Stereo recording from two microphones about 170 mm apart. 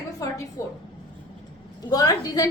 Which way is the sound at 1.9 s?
20° left (ahead or behind).